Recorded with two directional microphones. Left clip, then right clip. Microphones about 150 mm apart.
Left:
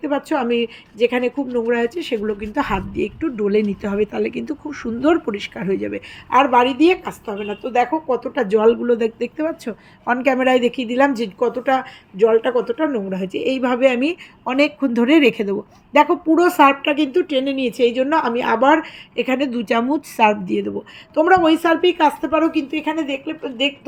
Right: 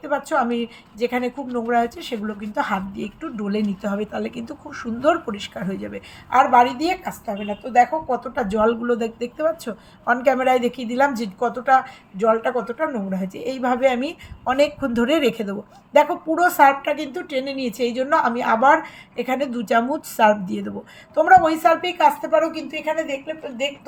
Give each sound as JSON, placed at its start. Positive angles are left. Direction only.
{"t": 0.0, "sound": "a woman's voice", "side_deg": 30}